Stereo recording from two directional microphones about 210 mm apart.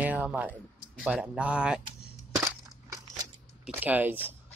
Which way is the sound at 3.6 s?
10° right (ahead or behind).